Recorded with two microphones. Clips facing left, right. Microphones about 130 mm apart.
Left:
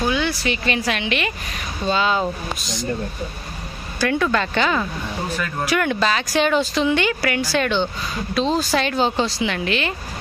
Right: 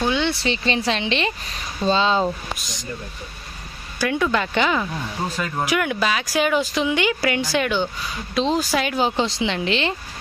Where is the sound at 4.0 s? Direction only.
15° right (ahead or behind).